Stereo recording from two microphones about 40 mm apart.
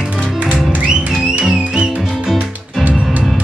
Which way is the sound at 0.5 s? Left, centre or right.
Centre.